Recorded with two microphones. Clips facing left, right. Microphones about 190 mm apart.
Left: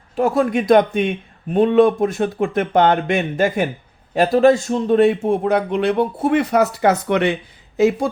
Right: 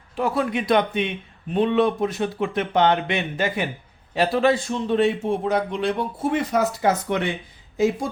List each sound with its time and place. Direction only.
0.2 s a man's voice: 45° left (ahead or behind); by 8.1 s 70° left (ahead or behind)